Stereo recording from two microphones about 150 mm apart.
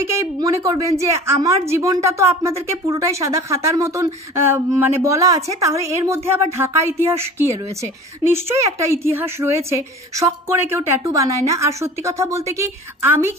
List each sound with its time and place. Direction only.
0.0 s a woman's voice: 20° right (ahead or behind)